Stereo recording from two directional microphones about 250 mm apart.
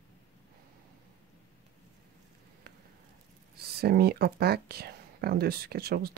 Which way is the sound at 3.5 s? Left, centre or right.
Right.